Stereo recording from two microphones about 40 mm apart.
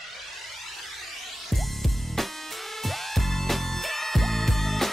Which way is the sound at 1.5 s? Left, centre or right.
Centre.